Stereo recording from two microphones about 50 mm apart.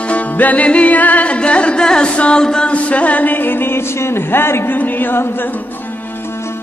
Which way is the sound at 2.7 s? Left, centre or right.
Left.